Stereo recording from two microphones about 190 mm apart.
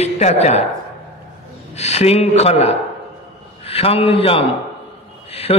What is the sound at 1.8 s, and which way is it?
A man's voice, 35° left (ahead or behind).